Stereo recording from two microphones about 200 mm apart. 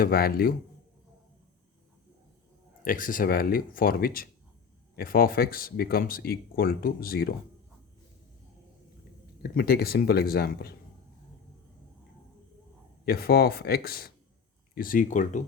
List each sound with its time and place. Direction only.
0.0 s speech: 50° left (ahead or behind)
2.8 s speech: 45° left (ahead or behind)
9.4 s speech: 50° left (ahead or behind)
13.1 s speech: 50° left (ahead or behind)